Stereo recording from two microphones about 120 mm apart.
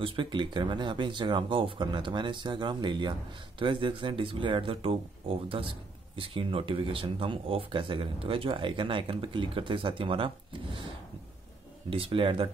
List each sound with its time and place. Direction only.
0.0 s speech: 45° right (ahead or behind)
11.9 s speech: 50° right (ahead or behind)